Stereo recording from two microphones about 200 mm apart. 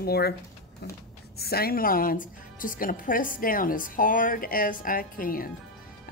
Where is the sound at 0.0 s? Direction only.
50° left (ahead or behind).